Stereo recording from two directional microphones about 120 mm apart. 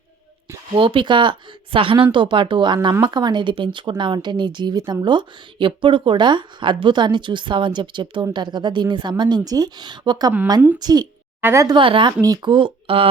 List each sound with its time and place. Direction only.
0.7 s a woman's voice: 45° right (ahead or behind)
11.3 s a woman's voice: 20° right (ahead or behind)
11.7 s speech: 45° right (ahead or behind)